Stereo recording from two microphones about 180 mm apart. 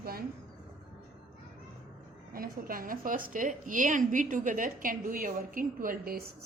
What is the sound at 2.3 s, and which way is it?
A woman's voice, 55° right (ahead or behind).